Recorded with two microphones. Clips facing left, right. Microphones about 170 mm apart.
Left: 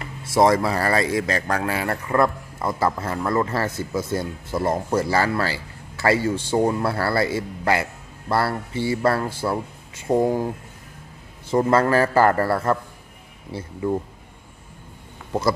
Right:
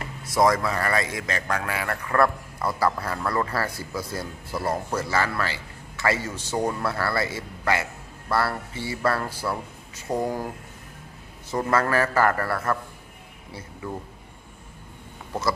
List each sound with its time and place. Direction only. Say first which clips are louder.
0.2 s speech: left 4 dB; 25° left (ahead or behind)
11.5 s speech: left 5 dB; 30° left (ahead or behind)